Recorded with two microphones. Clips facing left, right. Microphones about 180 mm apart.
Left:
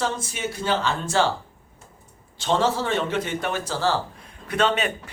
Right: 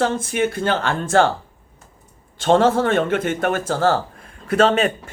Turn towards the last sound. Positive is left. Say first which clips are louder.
# right 6 dB
turn(degrees=-45)  # may be behind; listen again after turning